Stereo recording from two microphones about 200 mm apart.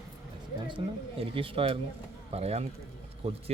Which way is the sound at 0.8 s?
25° right (ahead or behind).